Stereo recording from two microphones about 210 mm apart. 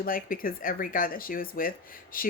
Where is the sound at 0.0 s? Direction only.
45° left (ahead or behind).